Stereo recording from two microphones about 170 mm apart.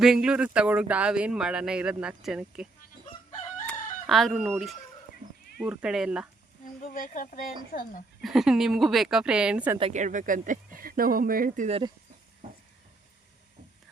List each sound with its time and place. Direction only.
0.0 s speech: 5° right (ahead or behind)
3.7 s chicken: centre (ahead or behind)
5.5 s speech: 5° right (ahead or behind)
6.8 s a woman's voice: 50° left (ahead or behind)
8.2 s speech: centre (ahead or behind)
9.9 s speech: 45° right (ahead or behind)